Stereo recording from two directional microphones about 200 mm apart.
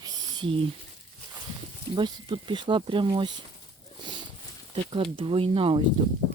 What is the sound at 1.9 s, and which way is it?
Speech, 25° right (ahead or behind).